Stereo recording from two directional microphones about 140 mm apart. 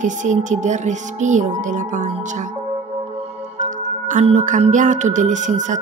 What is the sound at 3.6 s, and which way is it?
Music, 65° right (ahead or behind).